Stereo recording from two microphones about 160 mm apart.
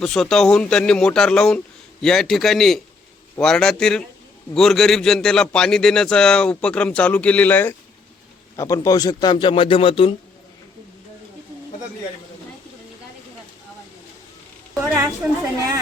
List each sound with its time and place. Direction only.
0.0 s a man's voice: centre (ahead or behind); by 10.2 s 35° left (ahead or behind)
14.8 s a woman's voice: 15° right (ahead or behind)